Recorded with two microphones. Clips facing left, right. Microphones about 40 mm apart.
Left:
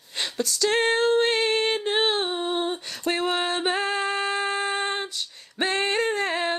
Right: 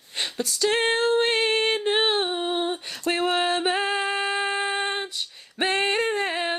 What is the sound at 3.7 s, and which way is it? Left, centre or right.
Female singing, right.